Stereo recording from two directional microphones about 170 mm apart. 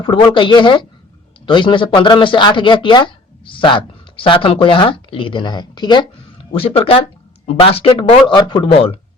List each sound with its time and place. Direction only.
0.0 s speech: 30° left (ahead or behind)